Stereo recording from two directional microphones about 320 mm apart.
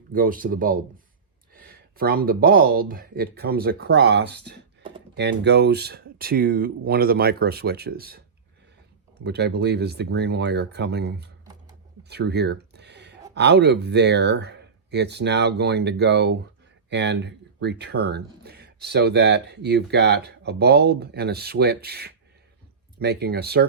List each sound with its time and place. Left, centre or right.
0.1 s speech: right
12.0 s a sound: right
13.3 s speech: right